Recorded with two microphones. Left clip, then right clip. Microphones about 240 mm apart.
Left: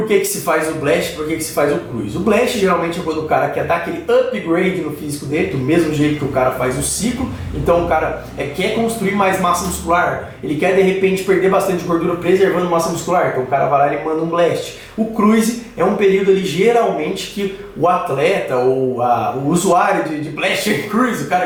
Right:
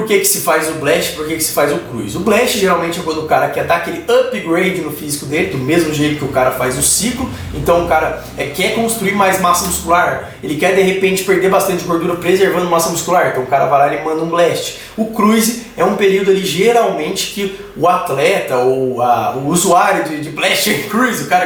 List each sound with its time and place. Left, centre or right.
0.1 s a man's voice: centre
16.6 s a man's voice: centre